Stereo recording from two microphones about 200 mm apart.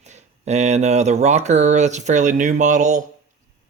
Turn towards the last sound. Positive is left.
turn(degrees=-40)  # may be behind; listen again after turning